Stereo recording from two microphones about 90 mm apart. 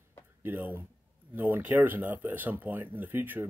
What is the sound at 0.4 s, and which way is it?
Speech, 20° right (ahead or behind).